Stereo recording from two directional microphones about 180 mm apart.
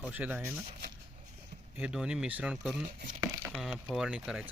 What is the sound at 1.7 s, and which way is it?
Speech, 5° right (ahead or behind).